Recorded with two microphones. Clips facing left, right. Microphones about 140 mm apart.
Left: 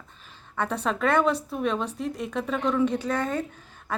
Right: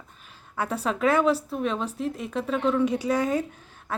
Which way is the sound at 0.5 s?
5° right (ahead or behind).